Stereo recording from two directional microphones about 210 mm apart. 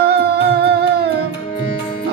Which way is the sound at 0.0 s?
50° right (ahead or behind).